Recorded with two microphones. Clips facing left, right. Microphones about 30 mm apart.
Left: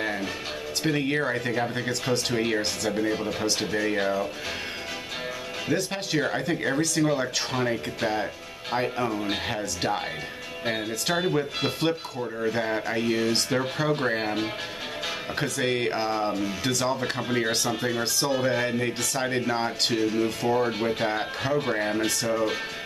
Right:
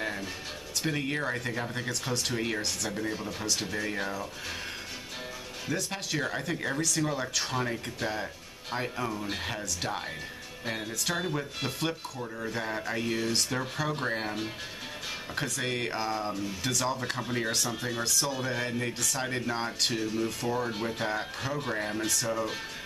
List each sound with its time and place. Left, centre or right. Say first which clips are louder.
0.8 s speech: left 6 dB; centre
5.7 s speech: left 5 dB; left
15.6 s speech: left 7 dB; left